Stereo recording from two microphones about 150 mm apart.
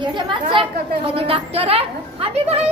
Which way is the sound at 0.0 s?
35° right (ahead or behind).